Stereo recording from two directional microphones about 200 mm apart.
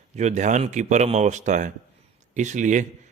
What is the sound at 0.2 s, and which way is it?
A man's voice, 35° right (ahead or behind).